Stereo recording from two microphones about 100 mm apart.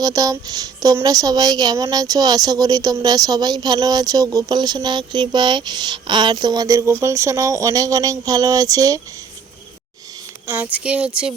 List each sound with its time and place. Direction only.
0.0 s speech: 35° right (ahead or behind)
10.4 s speech: 15° right (ahead or behind)